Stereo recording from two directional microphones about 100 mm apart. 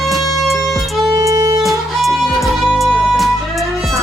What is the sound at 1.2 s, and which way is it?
Music, 35° right (ahead or behind).